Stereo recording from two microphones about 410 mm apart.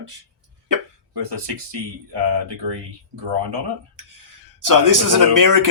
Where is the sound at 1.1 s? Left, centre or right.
Right.